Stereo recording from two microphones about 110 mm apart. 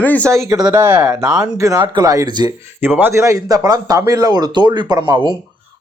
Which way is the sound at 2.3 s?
40° right (ahead or behind).